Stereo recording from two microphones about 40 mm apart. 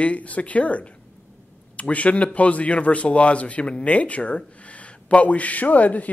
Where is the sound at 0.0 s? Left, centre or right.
Left.